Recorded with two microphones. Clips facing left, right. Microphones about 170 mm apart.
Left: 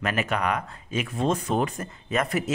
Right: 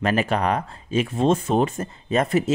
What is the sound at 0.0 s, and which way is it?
Speech, 30° right (ahead or behind).